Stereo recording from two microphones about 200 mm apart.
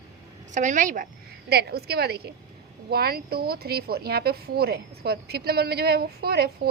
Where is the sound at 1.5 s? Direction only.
50° right (ahead or behind).